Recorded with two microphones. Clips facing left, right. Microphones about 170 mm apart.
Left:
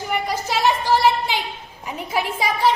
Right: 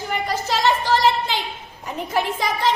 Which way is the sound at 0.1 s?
10° left (ahead or behind).